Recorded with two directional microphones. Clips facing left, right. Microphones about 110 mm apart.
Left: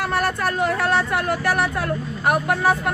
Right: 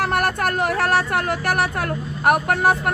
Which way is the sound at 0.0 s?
55° right (ahead or behind).